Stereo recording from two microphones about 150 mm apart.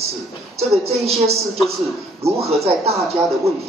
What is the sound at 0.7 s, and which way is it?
Speech, 40° right (ahead or behind).